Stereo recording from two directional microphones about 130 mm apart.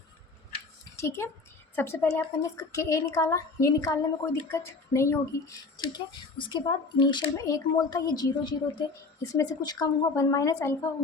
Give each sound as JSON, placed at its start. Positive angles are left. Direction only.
{"t": 0.9, "sound": "a woman's voice", "side_deg": 20}
{"t": 5.7, "sound": "a woman's voice", "side_deg": 35}